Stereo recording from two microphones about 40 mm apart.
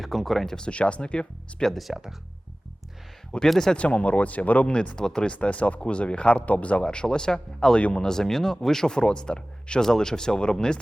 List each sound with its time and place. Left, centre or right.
0.0 s speech: centre
0.7 s speech: left
1.6 s speech: centre
3.3 s speech: centre
3.8 s speech: left
4.9 s speech: centre
5.3 s speech: left
6.8 s speech: left
7.8 s speech: left
8.0 s speech: centre